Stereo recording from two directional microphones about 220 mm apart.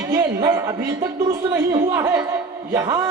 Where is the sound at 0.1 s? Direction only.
20° right (ahead or behind).